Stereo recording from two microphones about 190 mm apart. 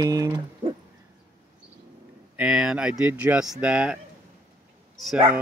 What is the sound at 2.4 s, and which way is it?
Speech, 5° right (ahead or behind).